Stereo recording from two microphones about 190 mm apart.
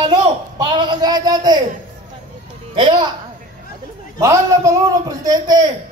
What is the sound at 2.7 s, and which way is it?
Speech, 25° right (ahead or behind).